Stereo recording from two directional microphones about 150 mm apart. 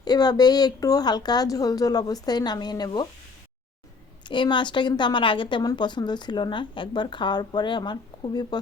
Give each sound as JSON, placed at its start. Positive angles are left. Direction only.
{"t": 0.0, "sound": "speech", "side_deg": 25}
{"t": 4.3, "sound": "a woman's voice", "side_deg": 30}